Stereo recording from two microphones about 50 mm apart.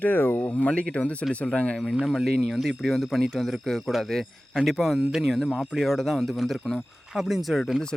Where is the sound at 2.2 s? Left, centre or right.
Centre.